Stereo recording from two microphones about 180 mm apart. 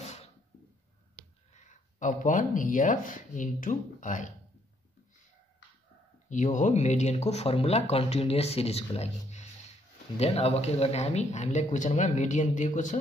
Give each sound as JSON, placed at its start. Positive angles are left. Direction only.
{"t": 1.5, "sound": "speech", "side_deg": 40}
{"t": 6.2, "sound": "speech", "side_deg": 45}